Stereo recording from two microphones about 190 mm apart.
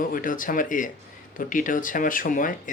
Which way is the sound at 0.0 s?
45° left (ahead or behind).